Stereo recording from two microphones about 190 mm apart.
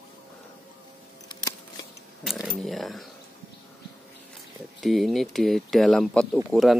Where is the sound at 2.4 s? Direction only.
Centre (ahead or behind).